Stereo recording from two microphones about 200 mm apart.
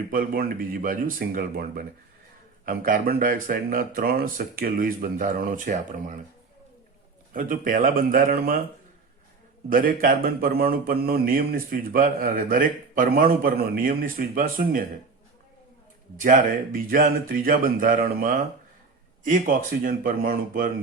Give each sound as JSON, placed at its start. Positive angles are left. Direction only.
{"t": 0.1, "sound": "speech", "side_deg": -45}
{"t": 7.3, "sound": "speech", "side_deg": -45}
{"t": 9.6, "sound": "speech", "side_deg": -45}
{"t": 16.1, "sound": "speech", "side_deg": -40}